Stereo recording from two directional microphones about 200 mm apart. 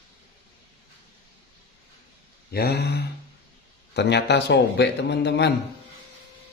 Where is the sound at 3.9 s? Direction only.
60° left (ahead or behind).